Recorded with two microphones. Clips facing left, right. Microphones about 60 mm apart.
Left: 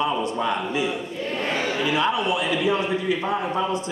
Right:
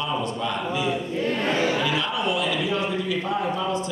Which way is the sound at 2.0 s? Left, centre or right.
Left.